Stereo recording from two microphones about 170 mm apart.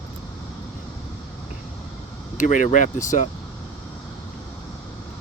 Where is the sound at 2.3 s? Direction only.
45° left (ahead or behind).